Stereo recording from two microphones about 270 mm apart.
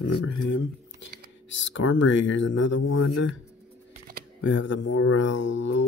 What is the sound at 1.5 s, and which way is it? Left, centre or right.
Speech, left.